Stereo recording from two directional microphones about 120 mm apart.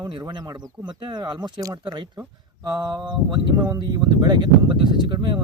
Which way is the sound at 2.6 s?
35° right (ahead or behind).